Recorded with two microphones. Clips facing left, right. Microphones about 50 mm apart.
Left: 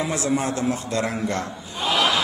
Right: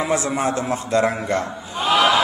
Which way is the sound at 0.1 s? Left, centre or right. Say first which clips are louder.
Right 3 dB; centre.